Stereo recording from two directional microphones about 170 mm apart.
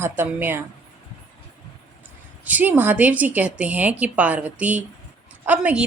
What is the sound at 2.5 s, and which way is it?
A woman's voice, 10° right (ahead or behind).